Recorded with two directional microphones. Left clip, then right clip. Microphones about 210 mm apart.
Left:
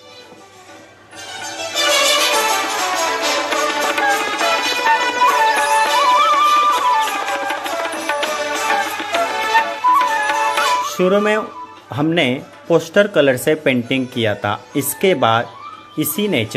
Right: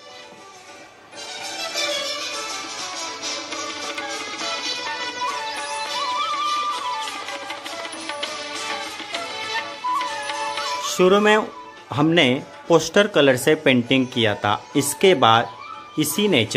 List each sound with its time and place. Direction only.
1.6 s music: 40° left (ahead or behind)
11.0 s speech: 5° right (ahead or behind)